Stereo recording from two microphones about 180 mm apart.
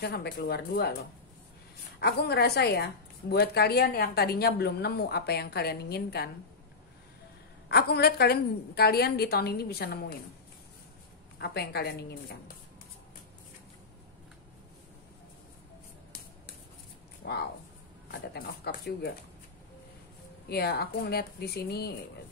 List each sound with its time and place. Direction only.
0.0 s a woman's voice: 60° left (ahead or behind)
2.0 s a woman's voice: 65° left (ahead or behind)
7.6 s a woman's voice: 65° left (ahead or behind)
11.3 s a woman's voice: 65° left (ahead or behind)
17.2 s a sound: 65° left (ahead or behind)
18.3 s a woman's voice: 60° left (ahead or behind)
20.4 s a woman's voice: 60° left (ahead or behind)